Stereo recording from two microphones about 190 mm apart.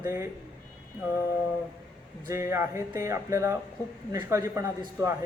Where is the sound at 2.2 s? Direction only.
15° right (ahead or behind).